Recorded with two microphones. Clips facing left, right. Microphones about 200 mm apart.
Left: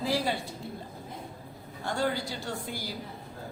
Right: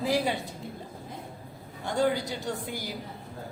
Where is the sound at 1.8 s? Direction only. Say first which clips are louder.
Right 4 dB; 20° right (ahead or behind).